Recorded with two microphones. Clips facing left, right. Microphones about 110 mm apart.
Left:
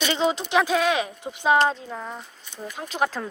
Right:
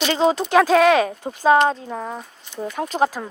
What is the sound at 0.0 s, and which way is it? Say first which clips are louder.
Speech: right 5 dB; 40° right (ahead or behind).